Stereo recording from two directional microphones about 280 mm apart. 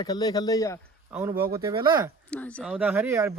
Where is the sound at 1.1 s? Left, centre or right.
Centre.